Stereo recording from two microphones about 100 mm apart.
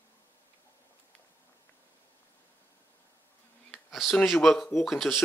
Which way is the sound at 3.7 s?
Centre (ahead or behind).